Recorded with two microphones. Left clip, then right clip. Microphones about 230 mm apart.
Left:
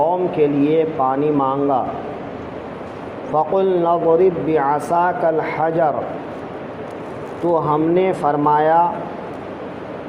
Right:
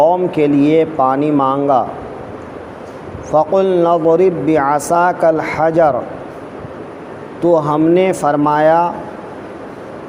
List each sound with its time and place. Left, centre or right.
0.0 s speech: right
3.3 s speech: right
7.4 s speech: right